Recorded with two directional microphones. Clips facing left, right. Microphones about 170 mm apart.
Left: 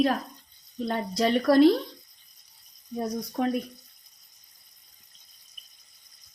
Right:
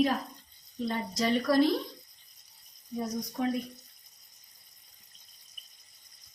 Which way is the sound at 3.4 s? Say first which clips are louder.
Left 3 dB; 60° left (ahead or behind).